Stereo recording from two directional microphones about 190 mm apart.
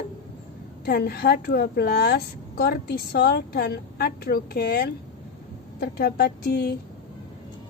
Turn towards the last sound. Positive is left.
turn(degrees=60)  # may be behind; listen again after turning